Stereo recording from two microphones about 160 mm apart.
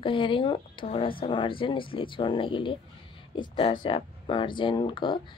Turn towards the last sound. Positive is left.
turn(degrees=30)  # may be behind; listen again after turning